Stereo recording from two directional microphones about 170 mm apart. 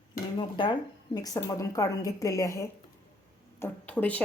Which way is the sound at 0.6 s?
25° left (ahead or behind).